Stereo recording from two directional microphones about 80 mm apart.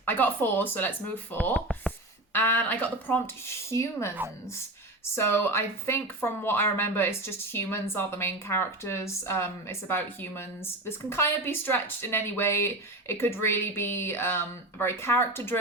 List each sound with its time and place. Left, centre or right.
0.0 s a woman's voice: left
3.4 s speech: left
5.1 s a woman's voice: left